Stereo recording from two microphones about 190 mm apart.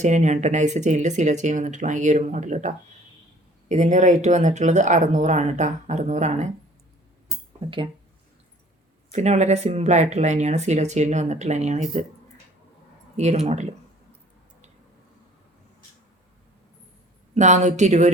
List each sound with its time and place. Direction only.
0.0 s speech: 40° right (ahead or behind)
7.6 s speech: 30° right (ahead or behind)
9.1 s speech: 35° right (ahead or behind)
13.1 s speech: 35° right (ahead or behind)
17.3 s speech: 40° right (ahead or behind)